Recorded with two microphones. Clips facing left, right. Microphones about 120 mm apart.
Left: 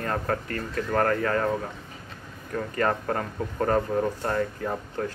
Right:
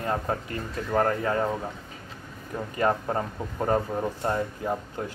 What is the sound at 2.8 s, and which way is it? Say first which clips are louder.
Speech: right 1 dB; 15° right (ahead or behind).